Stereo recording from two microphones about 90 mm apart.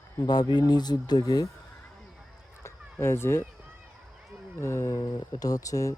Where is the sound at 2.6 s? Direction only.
30° left (ahead or behind).